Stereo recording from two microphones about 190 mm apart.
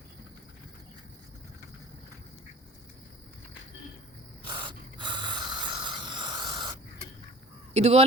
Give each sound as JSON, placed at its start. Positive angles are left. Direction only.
{"t": 4.4, "sound": "snort", "side_deg": -25}
{"t": 7.7, "sound": "speech", "side_deg": -35}